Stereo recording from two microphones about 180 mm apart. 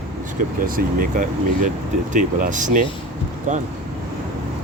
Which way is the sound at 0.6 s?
50° right (ahead or behind).